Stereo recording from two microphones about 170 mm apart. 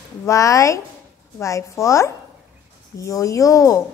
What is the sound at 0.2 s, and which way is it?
A woman's voice, 20° left (ahead or behind).